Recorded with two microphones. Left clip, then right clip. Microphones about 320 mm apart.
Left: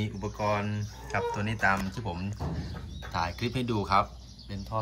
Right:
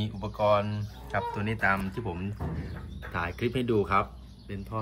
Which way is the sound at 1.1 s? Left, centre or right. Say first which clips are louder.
Even; centre.